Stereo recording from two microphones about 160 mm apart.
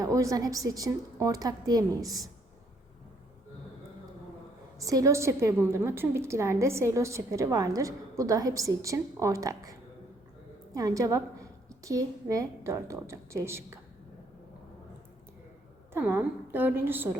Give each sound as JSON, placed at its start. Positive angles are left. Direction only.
{"t": 0.0, "sound": "a woman's voice", "side_deg": -20}
{"t": 4.8, "sound": "a woman's voice", "side_deg": -20}
{"t": 10.8, "sound": "a woman's voice", "side_deg": -20}
{"t": 15.9, "sound": "a woman's voice", "side_deg": -15}